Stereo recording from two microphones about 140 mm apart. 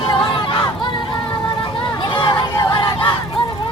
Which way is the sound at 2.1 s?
35° left (ahead or behind).